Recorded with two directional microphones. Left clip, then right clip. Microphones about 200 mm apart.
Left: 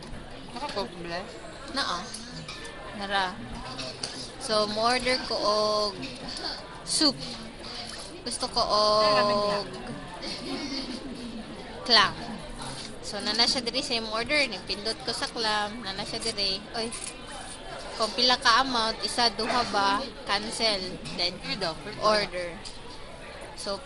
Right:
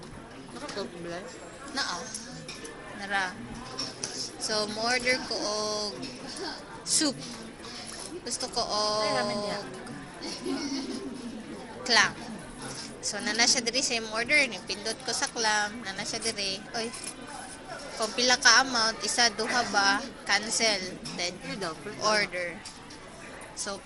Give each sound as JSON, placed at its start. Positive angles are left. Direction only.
{"t": 1.7, "sound": "speech", "side_deg": 15}
{"t": 3.0, "sound": "speech", "side_deg": 10}
{"t": 4.4, "sound": "speech", "side_deg": 15}
{"t": 8.2, "sound": "speech", "side_deg": 15}
{"t": 11.9, "sound": "speech", "side_deg": 15}
{"t": 13.1, "sound": "a woman's voice", "side_deg": 5}
{"t": 18.2, "sound": "a woman's voice", "side_deg": 5}